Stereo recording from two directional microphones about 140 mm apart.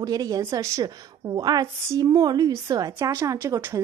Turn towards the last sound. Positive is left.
turn(degrees=-25)  # may be behind; listen again after turning